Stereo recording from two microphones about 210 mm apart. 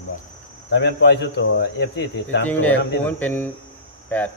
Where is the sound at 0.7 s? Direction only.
55° left (ahead or behind).